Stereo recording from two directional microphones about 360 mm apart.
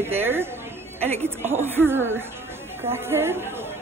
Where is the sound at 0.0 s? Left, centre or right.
Centre.